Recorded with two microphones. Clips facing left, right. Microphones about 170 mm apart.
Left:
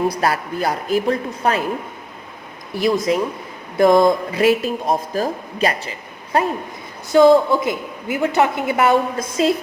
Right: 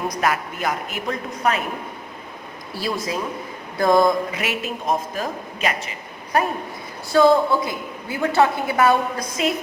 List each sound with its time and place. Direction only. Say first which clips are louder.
0.1 s speech: left 2 dB; 35° left (ahead or behind)
2.7 s a woman's voice: left 8 dB; 20° left (ahead or behind)
4.4 s a woman's voice: left 10 dB; 35° left (ahead or behind)